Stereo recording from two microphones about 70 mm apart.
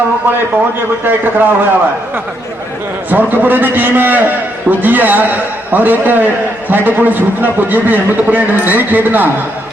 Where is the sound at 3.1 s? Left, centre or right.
Right.